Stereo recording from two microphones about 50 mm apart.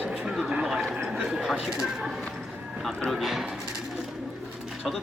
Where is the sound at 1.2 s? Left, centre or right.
Centre.